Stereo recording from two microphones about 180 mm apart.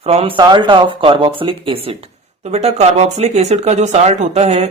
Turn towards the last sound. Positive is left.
turn(degrees=-35)  # may be behind; listen again after turning